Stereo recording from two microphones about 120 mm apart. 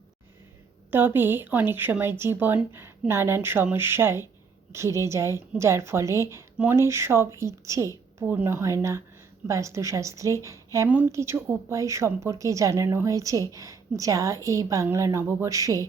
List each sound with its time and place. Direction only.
0.9 s a woman's voice: 15° right (ahead or behind)
10.8 s a woman's voice: 15° right (ahead or behind)